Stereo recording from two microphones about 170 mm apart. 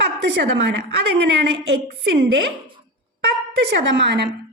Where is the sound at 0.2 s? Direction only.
90° right.